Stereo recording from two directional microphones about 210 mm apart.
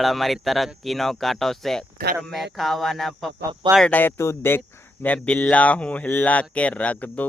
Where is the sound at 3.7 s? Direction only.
5° left (ahead or behind).